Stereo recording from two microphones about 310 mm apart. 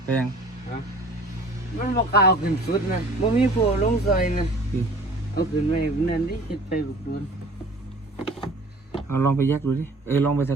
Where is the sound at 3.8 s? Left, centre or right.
Left.